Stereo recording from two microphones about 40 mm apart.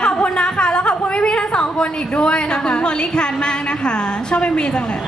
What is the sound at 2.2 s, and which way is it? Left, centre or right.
A woman's voice, left.